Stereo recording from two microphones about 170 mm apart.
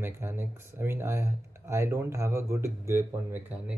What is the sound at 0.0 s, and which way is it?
Speech, 15° right (ahead or behind).